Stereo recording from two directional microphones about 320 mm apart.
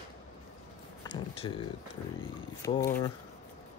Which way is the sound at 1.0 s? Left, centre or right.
Centre.